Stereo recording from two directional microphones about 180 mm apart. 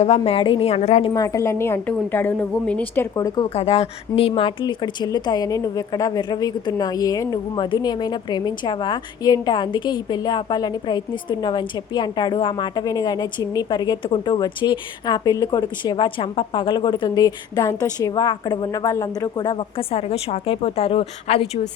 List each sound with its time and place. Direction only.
0.0 s a woman's voice: 35° left (ahead or behind)
1.1 s a woman's voice: 20° left (ahead or behind)
3.5 s speech: 35° left (ahead or behind)